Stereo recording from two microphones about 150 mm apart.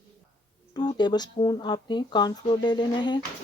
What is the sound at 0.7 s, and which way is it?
Speech, 30° left (ahead or behind).